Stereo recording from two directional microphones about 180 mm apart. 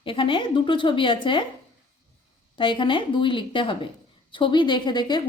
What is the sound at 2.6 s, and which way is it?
Speech, 25° left (ahead or behind).